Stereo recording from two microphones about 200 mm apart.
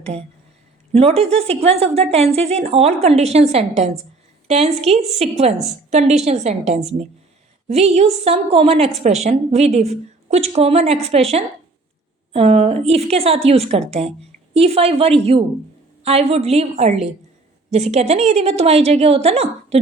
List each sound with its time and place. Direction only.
0.9 s a woman's voice: 30° right (ahead or behind)